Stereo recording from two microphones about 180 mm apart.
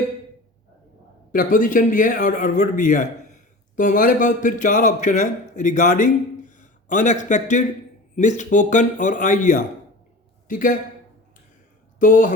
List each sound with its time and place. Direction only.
1.3 s a man's voice: 50° left (ahead or behind)
11.9 s speech: 50° left (ahead or behind)